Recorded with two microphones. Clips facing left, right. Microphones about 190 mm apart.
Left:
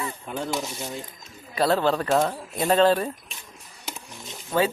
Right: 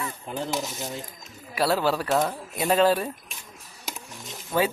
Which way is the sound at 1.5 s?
5° right (ahead or behind).